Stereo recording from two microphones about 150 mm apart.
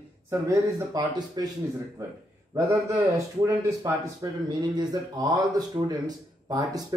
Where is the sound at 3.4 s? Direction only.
20° right (ahead or behind).